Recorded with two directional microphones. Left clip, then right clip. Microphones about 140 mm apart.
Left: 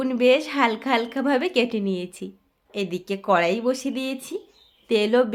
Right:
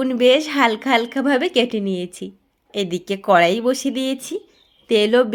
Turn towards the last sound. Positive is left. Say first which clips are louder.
# right 4 dB
turn(degrees=-30)  # may be behind; listen again after turning